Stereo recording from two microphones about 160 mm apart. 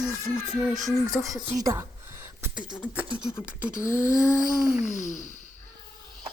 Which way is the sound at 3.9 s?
15° left (ahead or behind).